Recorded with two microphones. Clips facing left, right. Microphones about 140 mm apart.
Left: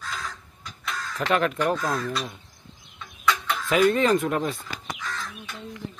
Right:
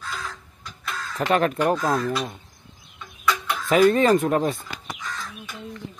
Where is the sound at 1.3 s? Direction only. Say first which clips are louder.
Right 3 dB; 40° right (ahead or behind).